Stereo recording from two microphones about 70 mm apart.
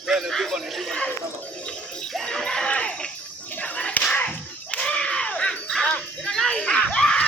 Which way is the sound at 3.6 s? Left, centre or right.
Centre.